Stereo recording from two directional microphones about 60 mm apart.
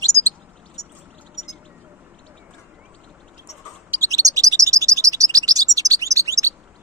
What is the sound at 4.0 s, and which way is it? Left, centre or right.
Chirp, right.